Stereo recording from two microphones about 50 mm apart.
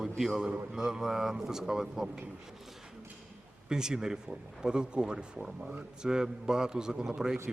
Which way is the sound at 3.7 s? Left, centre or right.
Centre.